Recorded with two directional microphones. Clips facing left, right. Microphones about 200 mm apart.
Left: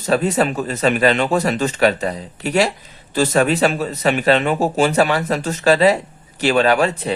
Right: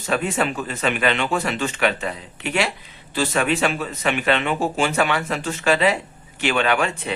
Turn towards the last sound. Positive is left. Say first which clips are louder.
# left 5 dB
turn(degrees=35)  # may be behind; listen again after turning